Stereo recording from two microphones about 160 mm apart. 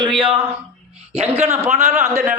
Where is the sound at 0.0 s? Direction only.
30° right (ahead or behind).